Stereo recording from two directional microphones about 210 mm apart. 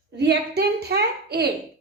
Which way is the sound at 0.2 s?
50° right (ahead or behind).